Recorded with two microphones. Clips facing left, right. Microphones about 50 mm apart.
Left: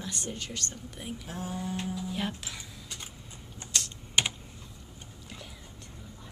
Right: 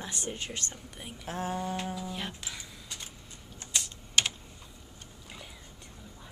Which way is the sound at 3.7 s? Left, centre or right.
Centre.